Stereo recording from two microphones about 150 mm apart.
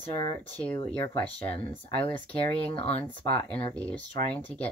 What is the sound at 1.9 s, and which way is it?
Speech, 40° left (ahead or behind).